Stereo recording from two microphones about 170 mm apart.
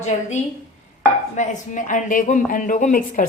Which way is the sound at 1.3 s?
45° left (ahead or behind).